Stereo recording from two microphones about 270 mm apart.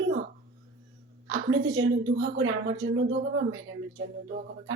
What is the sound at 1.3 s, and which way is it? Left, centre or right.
A woman's voice, right.